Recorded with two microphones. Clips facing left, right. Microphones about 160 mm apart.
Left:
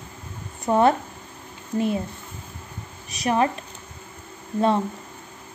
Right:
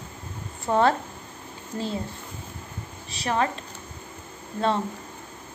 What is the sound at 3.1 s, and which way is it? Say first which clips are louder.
Speech: left 4 dB; 20° left (ahead or behind).